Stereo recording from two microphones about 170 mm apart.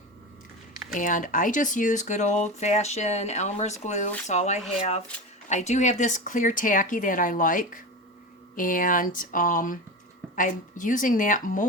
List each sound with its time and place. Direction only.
0.9 s speech: 50° left (ahead or behind)